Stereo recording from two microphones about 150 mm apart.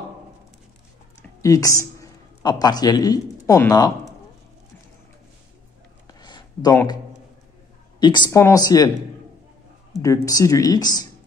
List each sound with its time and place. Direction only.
1.4 s speech: 20° left (ahead or behind)
6.0 s a sound: 30° left (ahead or behind)
8.0 s speech: 30° left (ahead or behind)
10.0 s speech: 20° left (ahead or behind)